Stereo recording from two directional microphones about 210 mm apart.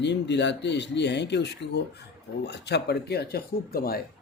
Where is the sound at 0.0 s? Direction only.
55° left (ahead or behind).